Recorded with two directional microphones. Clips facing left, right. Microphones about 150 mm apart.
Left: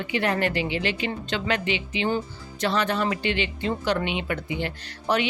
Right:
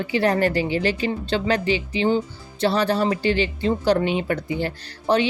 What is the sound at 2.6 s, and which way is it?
A woman's voice, 35° right (ahead or behind).